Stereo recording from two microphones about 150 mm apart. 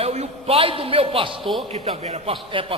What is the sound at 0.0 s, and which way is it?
A man's voice, 45° right (ahead or behind).